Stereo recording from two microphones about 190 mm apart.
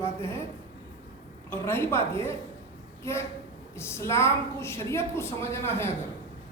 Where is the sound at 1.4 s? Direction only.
10° left (ahead or behind).